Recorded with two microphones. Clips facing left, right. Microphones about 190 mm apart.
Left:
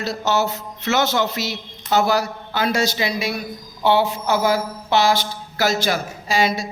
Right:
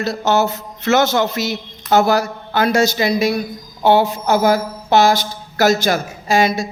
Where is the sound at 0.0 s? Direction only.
50° right (ahead or behind).